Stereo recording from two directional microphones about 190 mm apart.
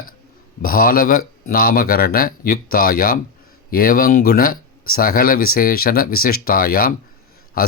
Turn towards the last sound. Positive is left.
turn(degrees=50)  # may be behind; listen again after turning